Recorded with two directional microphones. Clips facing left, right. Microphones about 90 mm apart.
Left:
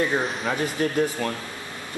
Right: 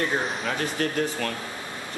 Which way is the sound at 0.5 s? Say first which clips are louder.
Left 4 dB; 15° left (ahead or behind).